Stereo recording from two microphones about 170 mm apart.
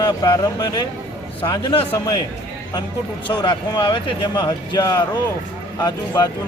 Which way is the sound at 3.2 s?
25° left (ahead or behind).